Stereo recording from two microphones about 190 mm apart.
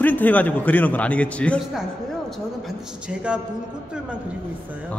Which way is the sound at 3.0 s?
5° right (ahead or behind).